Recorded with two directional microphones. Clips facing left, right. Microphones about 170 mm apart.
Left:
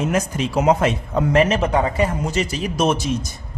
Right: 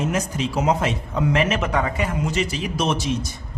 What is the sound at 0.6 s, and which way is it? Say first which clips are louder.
Speech: left 6 dB; 50° left (ahead or behind).